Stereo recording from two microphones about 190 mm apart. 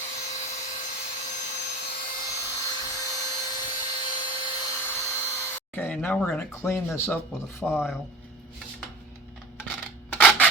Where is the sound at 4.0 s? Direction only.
25° left (ahead or behind).